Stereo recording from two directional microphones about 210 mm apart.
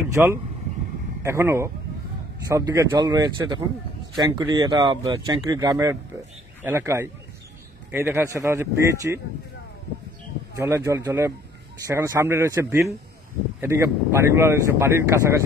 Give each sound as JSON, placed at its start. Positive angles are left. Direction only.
{"t": 0.2, "sound": "speech", "side_deg": -5}
{"t": 10.6, "sound": "speech", "side_deg": -15}